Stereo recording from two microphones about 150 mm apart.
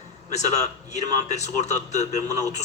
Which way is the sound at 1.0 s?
50° left (ahead or behind).